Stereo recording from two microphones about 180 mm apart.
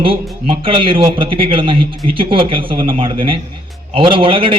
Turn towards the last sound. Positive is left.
turn(degrees=-30)  # may be behind; listen again after turning